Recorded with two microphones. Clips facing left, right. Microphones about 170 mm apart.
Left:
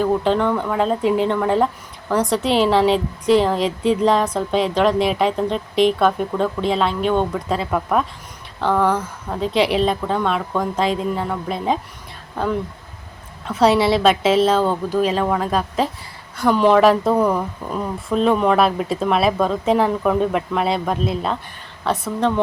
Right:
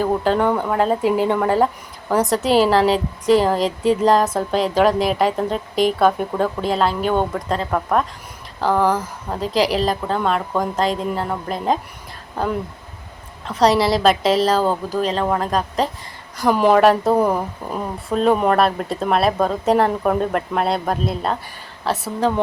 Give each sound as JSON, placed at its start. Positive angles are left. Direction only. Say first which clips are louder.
{"t": 0.0, "sound": "a woman's voice", "louder": "even", "side_deg": -5}
{"t": 13.5, "sound": "a woman's voice", "louder": "left 1 dB", "side_deg": 5}
{"t": 17.1, "sound": "speech", "louder": "even", "side_deg": -25}
{"t": 17.3, "sound": "a woman's voice", "louder": "even", "side_deg": -5}